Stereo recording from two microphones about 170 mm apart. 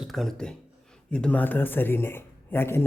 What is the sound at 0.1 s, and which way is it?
A man's voice, centre (ahead or behind).